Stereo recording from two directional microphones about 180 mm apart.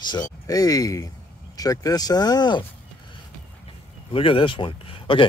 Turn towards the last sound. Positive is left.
turn(degrees=30)  # may be behind; listen again after turning